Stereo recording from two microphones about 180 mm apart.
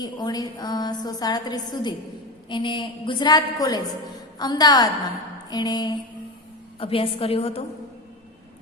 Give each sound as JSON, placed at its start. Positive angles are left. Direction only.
{"t": 0.0, "sound": "a woman's voice", "side_deg": 25}